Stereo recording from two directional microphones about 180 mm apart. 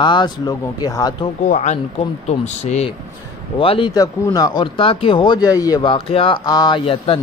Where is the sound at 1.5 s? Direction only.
40° left (ahead or behind).